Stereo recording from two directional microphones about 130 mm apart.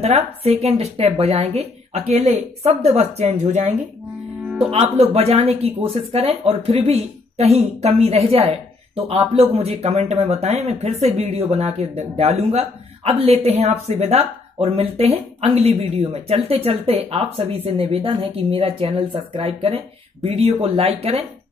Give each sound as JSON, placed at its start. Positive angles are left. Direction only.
{"t": 0.0, "sound": "speech", "side_deg": -50}
{"t": 4.6, "sound": "speech", "side_deg": -55}